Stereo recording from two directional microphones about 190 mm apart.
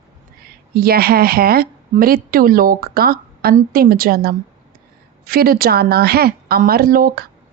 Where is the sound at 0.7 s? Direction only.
55° right (ahead or behind).